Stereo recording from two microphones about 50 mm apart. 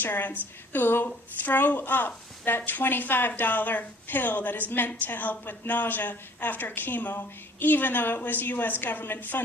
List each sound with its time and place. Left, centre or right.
0.0 s a woman's voice: left